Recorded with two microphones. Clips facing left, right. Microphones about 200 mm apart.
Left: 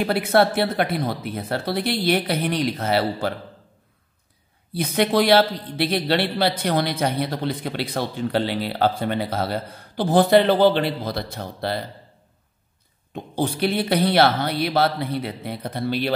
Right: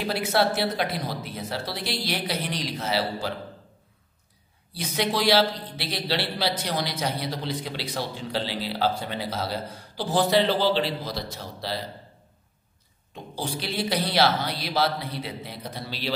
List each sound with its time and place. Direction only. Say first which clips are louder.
0.0 s a man's voice: left 5 dB; 55° left (ahead or behind)
4.7 s a man's voice: left 7 dB; 55° left (ahead or behind)
13.1 s a man's voice: left 7 dB; 55° left (ahead or behind)